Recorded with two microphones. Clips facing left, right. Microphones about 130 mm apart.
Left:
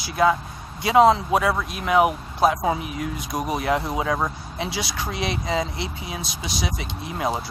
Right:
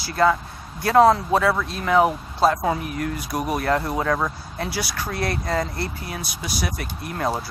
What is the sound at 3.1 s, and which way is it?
Speech, 20° left (ahead or behind).